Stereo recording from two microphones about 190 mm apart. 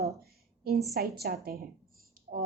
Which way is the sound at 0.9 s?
55° right (ahead or behind).